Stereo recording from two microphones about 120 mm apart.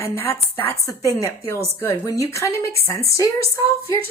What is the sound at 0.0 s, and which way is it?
Speech, 20° left (ahead or behind).